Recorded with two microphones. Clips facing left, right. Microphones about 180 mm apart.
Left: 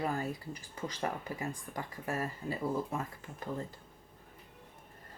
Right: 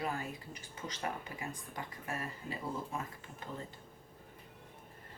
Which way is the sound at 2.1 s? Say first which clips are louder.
Left 5 dB; 40° left (ahead or behind).